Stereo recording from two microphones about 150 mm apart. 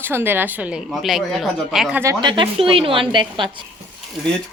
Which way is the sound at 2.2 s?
35° right (ahead or behind).